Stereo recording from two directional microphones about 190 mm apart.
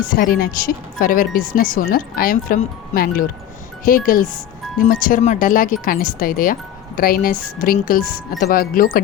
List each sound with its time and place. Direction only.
0.0 s speech: 50° left (ahead or behind)